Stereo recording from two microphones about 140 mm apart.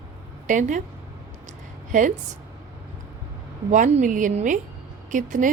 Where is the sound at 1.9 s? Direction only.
70° right (ahead or behind).